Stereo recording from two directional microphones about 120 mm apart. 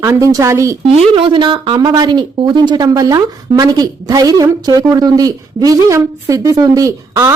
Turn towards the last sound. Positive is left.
turn(degrees=-30)  # may be behind; listen again after turning